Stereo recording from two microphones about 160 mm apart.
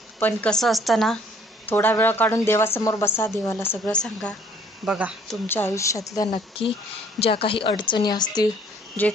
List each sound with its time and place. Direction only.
0.2 s a woman's voice: 5° left (ahead or behind)
1.7 s speech: 10° left (ahead or behind)
4.8 s speech: 10° right (ahead or behind)
5.5 s speech: 15° left (ahead or behind)